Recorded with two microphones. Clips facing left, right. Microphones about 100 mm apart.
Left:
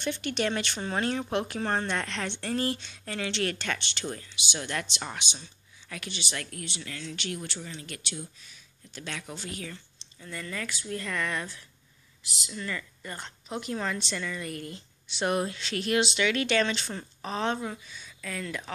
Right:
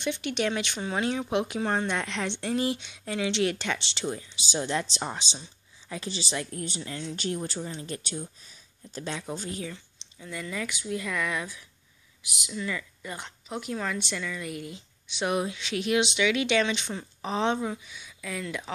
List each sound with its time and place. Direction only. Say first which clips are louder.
0.0 s speech: right 1 dB; 15° right (ahead or behind)
5.4 s a sound: right 2 dB; 20° right (ahead or behind)
6.0 s speech: right 5 dB; 35° right (ahead or behind)
6.8 s speech: right 4 dB; 25° right (ahead or behind)
7.2 s speech: right 7 dB; 35° right (ahead or behind)
9.0 s speech: right 4 dB; 25° right (ahead or behind)
9.3 s speech: right 5 dB; 40° right (ahead or behind)
9.7 s a woman's voice: right 3 dB; 10° right (ahead or behind)
17.6 s speech: right 4 dB; 10° right (ahead or behind)